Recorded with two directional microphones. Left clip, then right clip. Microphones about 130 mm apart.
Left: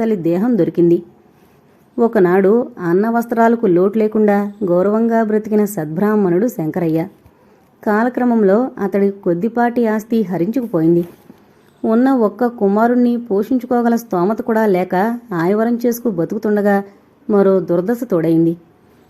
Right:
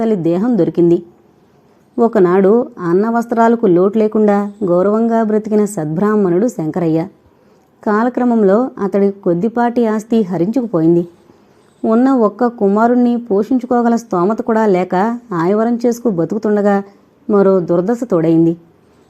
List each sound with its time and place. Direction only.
0.0 s a woman's voice: 20° right (ahead or behind)
6.1 s a woman's voice: centre (ahead or behind)
6.7 s a woman's voice: 20° right (ahead or behind)
11.8 s speech: 10° right (ahead or behind)
14.3 s speech: 10° right (ahead or behind)
15.8 s a woman's voice: centre (ahead or behind)
16.4 s a woman's voice: 15° right (ahead or behind)